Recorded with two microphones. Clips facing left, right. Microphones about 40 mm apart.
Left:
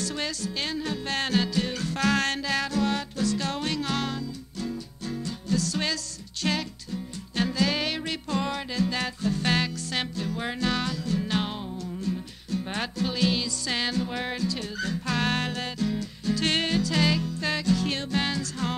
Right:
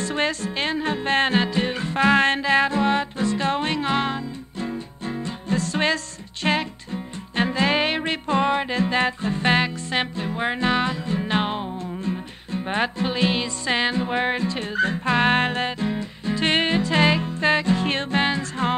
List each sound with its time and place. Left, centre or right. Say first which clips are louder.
0.0 s music: right 7 dB; right